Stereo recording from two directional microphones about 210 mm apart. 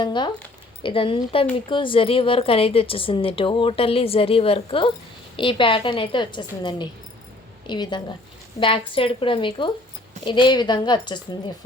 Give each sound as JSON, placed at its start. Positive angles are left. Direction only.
{"t": 0.0, "sound": "a woman's voice", "side_deg": 20}